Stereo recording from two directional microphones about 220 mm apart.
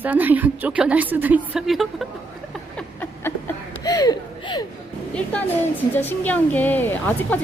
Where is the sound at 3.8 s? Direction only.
15° left (ahead or behind).